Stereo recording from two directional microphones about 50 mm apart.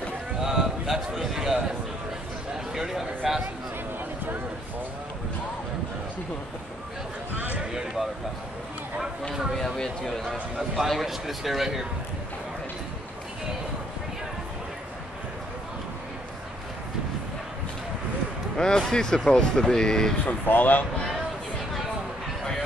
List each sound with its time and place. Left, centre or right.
0.4 s a sound: centre
2.7 s a sound: centre
7.7 s speech: centre
9.6 s speech: centre
18.6 s speech: centre
20.2 s speech: left